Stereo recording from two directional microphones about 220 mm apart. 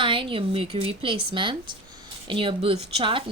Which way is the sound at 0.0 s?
20° right (ahead or behind).